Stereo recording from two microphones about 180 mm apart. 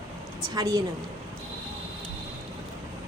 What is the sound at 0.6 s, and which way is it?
Speech, 20° right (ahead or behind).